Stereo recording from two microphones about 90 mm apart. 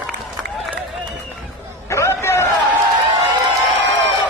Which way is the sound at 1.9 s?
30° left (ahead or behind).